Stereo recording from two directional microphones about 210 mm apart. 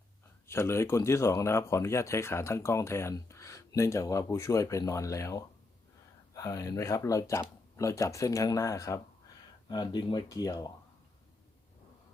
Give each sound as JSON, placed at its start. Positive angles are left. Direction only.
{"t": 0.4, "sound": "speech", "side_deg": 10}